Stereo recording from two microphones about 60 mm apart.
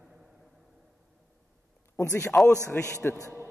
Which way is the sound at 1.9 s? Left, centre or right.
Left.